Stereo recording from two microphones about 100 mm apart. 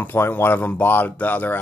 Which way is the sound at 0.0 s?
20° left (ahead or behind).